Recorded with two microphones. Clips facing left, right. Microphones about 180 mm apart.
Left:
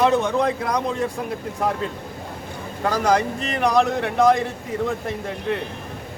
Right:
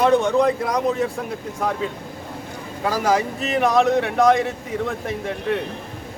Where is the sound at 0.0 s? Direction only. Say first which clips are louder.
Right 2 dB; centre (ahead or behind).